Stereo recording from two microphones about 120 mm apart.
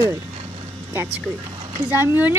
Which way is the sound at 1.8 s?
15° right (ahead or behind).